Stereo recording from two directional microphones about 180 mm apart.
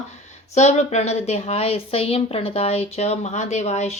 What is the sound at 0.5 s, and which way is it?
A woman's voice, 40° left (ahead or behind).